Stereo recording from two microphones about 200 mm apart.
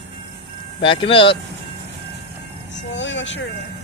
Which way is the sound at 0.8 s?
25° left (ahead or behind).